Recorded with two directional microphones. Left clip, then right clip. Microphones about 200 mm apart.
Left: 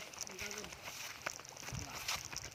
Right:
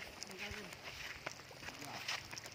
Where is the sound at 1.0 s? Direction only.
55° left (ahead or behind).